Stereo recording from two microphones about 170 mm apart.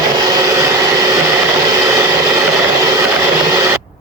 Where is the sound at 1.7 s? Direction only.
20° right (ahead or behind).